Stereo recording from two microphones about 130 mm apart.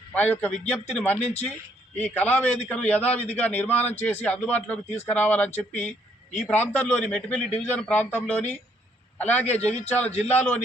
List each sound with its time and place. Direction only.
0.1 s a man's voice: 10° left (ahead or behind)
9.6 s a man's voice: 60° left (ahead or behind)
10.0 s a man's voice: 10° left (ahead or behind)